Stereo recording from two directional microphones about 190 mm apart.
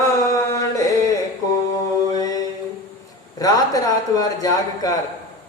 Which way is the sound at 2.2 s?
20° left (ahead or behind).